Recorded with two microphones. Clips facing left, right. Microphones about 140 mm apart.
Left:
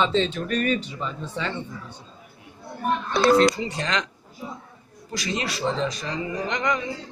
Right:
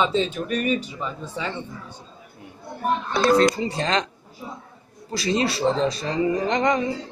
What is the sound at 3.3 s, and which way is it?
Speech, 35° right (ahead or behind).